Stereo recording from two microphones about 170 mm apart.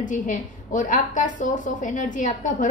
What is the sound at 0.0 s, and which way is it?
A woman's voice, 50° left (ahead or behind).